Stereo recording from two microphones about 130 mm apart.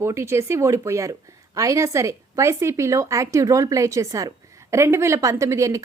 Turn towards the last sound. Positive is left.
turn(degrees=-25)  # may be behind; listen again after turning